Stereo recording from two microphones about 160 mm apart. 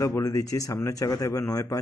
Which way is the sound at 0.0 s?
20° left (ahead or behind).